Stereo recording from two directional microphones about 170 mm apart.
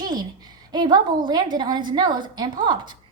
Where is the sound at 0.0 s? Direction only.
25° right (ahead or behind).